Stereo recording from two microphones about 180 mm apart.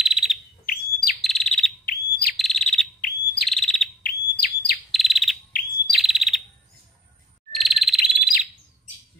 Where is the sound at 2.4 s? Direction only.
Centre (ahead or behind).